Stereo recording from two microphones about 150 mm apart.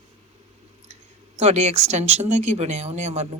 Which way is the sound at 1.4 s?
45° right (ahead or behind).